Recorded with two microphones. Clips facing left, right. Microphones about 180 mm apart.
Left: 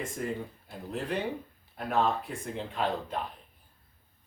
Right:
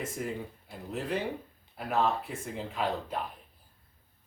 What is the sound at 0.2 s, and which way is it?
Speech, 5° right (ahead or behind).